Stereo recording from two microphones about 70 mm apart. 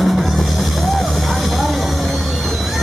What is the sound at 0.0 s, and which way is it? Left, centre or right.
Music, centre.